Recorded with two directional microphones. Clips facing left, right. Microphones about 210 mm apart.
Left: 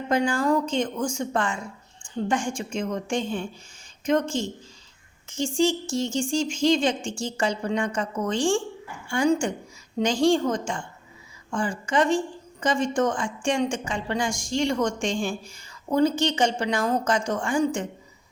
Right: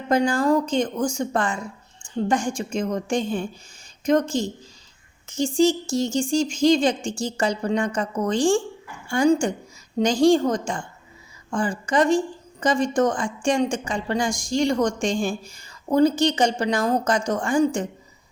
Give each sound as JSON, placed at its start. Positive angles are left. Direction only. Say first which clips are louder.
{"t": 0.1, "sound": "a woman's voice", "louder": "right 3 dB", "side_deg": -35}
{"t": 5.5, "sound": "a woman's voice", "louder": "right 4 dB", "side_deg": -40}